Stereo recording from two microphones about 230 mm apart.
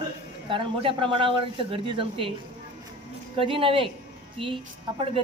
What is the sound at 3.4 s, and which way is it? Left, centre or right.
Speech, right.